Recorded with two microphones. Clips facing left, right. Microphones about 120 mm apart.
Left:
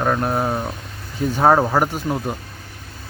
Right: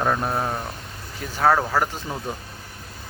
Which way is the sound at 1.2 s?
20° left (ahead or behind).